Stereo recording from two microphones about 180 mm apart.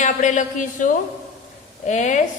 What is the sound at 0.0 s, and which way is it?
Speech, 40° left (ahead or behind).